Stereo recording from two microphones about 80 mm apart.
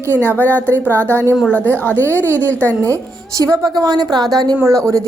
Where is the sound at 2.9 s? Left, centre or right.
Right.